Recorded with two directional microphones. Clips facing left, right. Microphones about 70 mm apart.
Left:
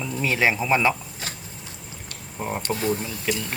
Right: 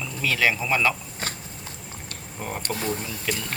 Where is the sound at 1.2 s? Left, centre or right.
Right.